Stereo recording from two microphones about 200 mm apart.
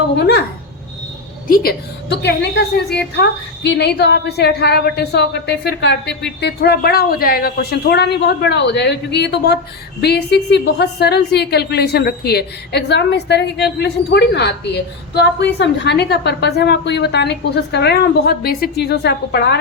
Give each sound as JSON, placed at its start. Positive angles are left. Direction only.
{"t": 0.2, "sound": "a woman's voice", "side_deg": 55}
{"t": 1.5, "sound": "a woman's voice", "side_deg": 50}